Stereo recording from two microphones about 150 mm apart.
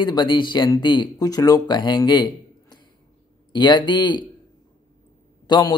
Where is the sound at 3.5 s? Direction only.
30° left (ahead or behind).